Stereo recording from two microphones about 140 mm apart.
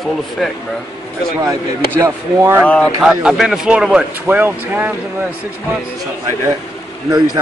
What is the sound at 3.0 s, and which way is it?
Speech, 5° right (ahead or behind).